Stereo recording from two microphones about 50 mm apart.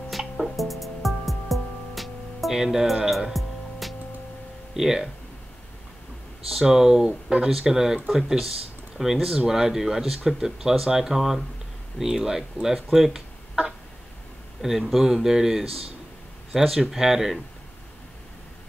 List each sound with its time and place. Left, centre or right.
0.1 s music: centre
4.7 s speech: centre
6.6 s speech: centre
14.6 s speech: centre